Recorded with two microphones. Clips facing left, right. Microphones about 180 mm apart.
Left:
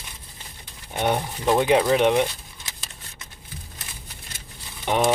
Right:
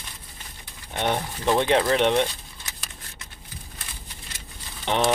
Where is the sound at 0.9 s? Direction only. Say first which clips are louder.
Left 2 dB; 10° left (ahead or behind).